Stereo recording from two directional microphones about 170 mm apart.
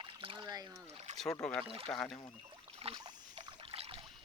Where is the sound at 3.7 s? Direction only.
35° right (ahead or behind).